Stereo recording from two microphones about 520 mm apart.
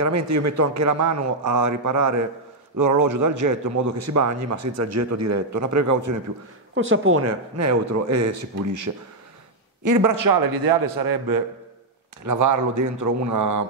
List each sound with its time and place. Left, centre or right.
0.0 s a man's voice: right
6.7 s a man's voice: right